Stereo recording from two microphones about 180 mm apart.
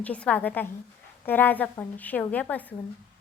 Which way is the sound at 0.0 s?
5° left (ahead or behind).